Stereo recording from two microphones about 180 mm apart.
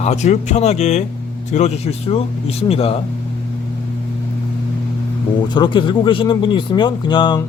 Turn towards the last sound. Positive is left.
turn(degrees=25)  # may be behind; listen again after turning